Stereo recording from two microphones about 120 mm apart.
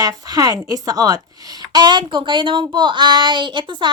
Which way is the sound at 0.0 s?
30° right (ahead or behind).